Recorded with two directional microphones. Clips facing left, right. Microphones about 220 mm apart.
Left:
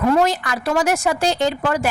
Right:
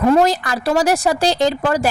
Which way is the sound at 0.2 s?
35° right (ahead or behind).